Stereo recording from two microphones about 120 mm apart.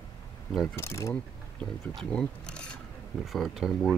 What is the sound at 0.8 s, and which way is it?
Speech, 25° left (ahead or behind).